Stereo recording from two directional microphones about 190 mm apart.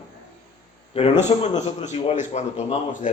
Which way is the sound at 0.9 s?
30° left (ahead or behind).